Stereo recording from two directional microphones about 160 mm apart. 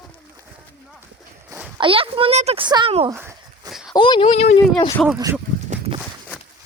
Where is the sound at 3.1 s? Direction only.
15° right (ahead or behind).